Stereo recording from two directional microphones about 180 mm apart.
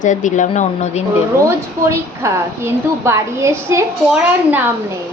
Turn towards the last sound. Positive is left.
turn(degrees=-10)  # may be behind; listen again after turning